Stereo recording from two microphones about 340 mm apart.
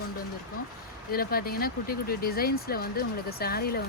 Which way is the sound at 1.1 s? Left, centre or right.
Left.